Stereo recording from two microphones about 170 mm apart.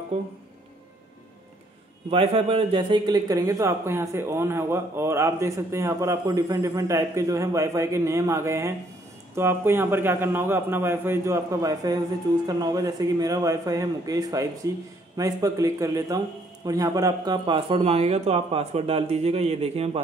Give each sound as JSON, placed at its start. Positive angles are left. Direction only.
{"t": 2.0, "sound": "speech", "side_deg": -30}